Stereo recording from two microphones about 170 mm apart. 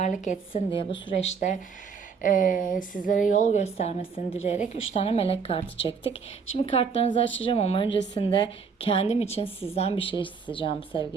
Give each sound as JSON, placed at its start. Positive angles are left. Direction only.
{"t": 0.0, "sound": "a woman's voice", "side_deg": 45}
{"t": 0.5, "sound": "a woman's voice", "side_deg": 30}
{"t": 2.2, "sound": "a woman's voice", "side_deg": 50}